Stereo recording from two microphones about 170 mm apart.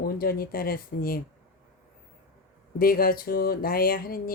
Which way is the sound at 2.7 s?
60° left (ahead or behind).